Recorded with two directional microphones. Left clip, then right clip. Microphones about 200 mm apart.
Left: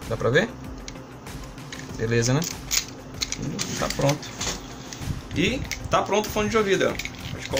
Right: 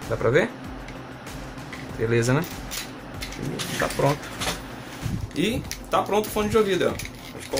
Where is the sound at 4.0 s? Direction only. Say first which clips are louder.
Right 1 dB; 10° right (ahead or behind).